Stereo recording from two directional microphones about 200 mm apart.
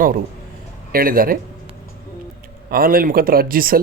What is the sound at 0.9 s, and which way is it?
Speech, 45° right (ahead or behind).